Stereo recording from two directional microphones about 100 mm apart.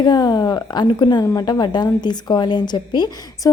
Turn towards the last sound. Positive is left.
turn(degrees=30)  # may be behind; listen again after turning